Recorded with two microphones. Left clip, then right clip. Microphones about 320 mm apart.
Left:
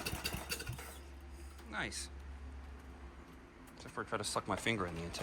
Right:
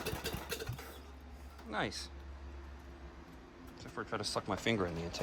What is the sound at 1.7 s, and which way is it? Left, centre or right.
Speech, centre.